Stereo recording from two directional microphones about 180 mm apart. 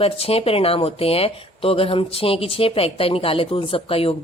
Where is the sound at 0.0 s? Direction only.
30° left (ahead or behind).